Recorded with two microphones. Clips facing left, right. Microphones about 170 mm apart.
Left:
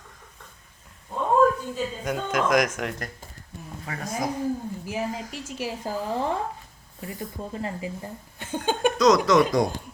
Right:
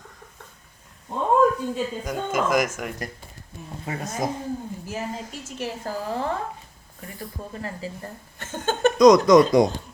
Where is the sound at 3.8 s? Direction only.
25° right (ahead or behind).